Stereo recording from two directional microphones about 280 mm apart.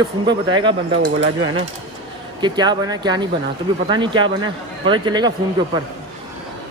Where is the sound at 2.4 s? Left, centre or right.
Centre.